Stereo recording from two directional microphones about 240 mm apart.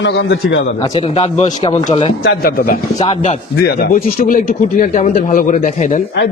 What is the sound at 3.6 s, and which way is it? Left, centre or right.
A man's voice, left.